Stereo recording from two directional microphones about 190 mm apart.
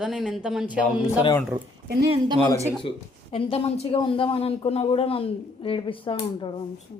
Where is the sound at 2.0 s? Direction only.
25° right (ahead or behind).